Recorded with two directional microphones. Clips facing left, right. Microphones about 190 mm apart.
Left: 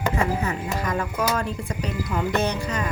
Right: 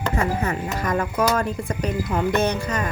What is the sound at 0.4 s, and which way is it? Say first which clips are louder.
Speech: right 2 dB; 45° right (ahead or behind).